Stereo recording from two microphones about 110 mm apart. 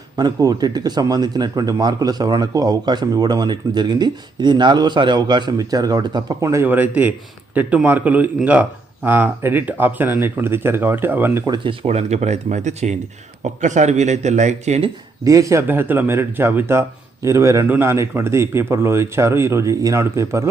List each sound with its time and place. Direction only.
0.3 s a man's voice: 35° right (ahead or behind); by 11.4 s 20° right (ahead or behind)
11.4 s speech: 40° right (ahead or behind)
11.7 s speech: 65° right (ahead or behind); by 14.8 s 85° right
15.2 s speech: 30° right (ahead or behind)
15.6 s speech: 20° right (ahead or behind)